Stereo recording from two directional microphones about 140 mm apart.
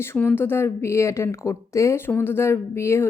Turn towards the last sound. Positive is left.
turn(degrees=20)  # may be behind; listen again after turning